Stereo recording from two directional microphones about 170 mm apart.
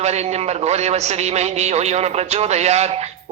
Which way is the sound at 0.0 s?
40° right (ahead or behind).